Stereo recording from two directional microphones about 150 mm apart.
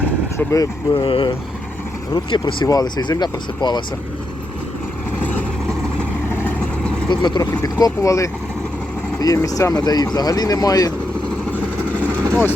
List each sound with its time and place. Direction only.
0.3 s speech: 20° left (ahead or behind)
0.9 s speech: 35° left (ahead or behind)
6.3 s vehicle: 10° left (ahead or behind)
7.1 s speech: 30° left (ahead or behind)